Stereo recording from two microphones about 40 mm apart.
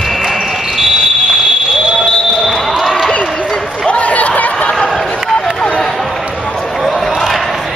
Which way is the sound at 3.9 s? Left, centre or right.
Left.